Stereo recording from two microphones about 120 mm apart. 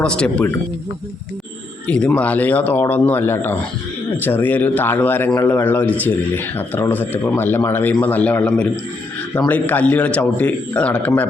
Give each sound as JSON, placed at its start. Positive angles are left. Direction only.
{"t": 0.0, "sound": "a man's voice", "side_deg": 10}
{"t": 1.9, "sound": "a man's voice", "side_deg": 10}